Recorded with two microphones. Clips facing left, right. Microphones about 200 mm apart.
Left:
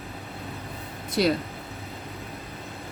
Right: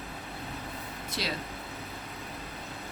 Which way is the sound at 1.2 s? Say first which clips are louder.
Left 13 dB; 50° left (ahead or behind).